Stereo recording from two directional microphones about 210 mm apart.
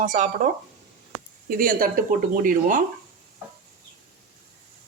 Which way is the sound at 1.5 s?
40° right (ahead or behind).